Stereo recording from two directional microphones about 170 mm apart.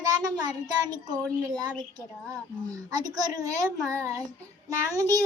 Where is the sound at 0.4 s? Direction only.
25° right (ahead or behind).